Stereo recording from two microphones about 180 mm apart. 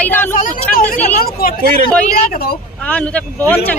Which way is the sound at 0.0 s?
10° left (ahead or behind).